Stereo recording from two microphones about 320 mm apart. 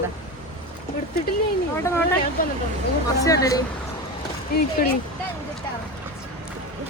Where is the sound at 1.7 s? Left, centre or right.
Centre.